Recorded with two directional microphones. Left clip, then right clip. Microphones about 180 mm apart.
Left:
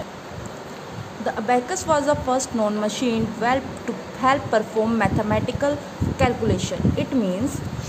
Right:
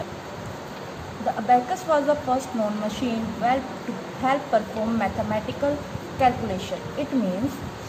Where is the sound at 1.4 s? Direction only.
45° left (ahead or behind).